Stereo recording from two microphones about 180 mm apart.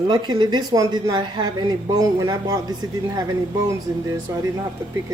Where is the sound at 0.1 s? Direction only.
25° right (ahead or behind).